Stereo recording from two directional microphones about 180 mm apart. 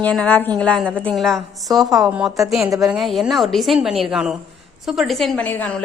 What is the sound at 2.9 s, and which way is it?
A woman's voice, centre (ahead or behind).